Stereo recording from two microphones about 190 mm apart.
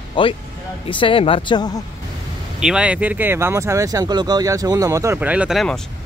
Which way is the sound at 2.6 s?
5° right (ahead or behind).